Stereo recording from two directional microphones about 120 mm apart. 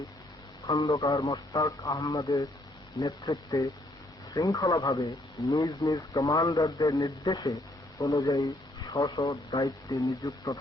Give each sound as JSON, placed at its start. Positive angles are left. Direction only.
{"t": 0.9, "sound": "a man's voice", "side_deg": 25}